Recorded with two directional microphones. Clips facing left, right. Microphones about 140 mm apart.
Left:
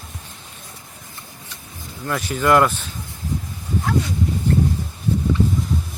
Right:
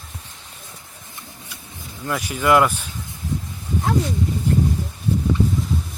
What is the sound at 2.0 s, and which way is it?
Speech, 10° right (ahead or behind).